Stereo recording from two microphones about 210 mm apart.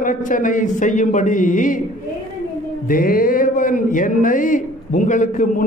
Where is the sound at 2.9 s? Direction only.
45° left (ahead or behind).